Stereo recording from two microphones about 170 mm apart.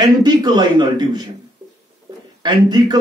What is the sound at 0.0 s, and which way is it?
Speech, 25° right (ahead or behind).